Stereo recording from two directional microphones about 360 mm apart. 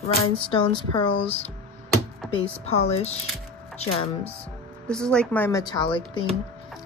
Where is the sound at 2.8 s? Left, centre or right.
Centre.